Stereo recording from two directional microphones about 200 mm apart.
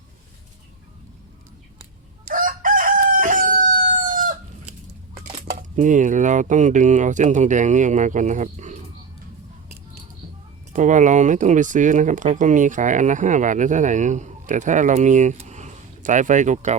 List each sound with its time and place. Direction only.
2.2 s chicken: 45° right (ahead or behind)
5.3 s speech: 35° right (ahead or behind)
10.7 s speech: 40° right (ahead or behind)